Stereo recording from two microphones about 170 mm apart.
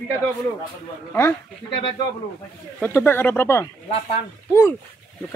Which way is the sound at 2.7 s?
10° left (ahead or behind).